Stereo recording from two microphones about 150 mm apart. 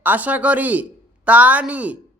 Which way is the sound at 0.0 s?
10° right (ahead or behind).